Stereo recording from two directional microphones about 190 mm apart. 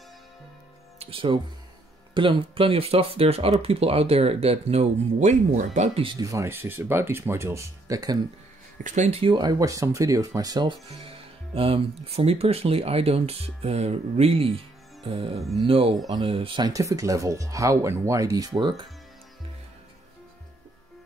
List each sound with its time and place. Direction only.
0.9 s speech: 30° right (ahead or behind)
6.1 s speech: 15° right (ahead or behind)
8.8 s speech: 40° right (ahead or behind)
15.0 s music: 30° right (ahead or behind)
15.6 s speech: 30° right (ahead or behind)